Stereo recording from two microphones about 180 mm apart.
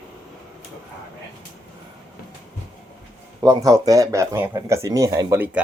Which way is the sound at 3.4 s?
20° right (ahead or behind).